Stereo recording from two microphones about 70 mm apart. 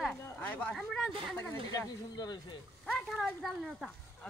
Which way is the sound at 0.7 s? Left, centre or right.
Centre.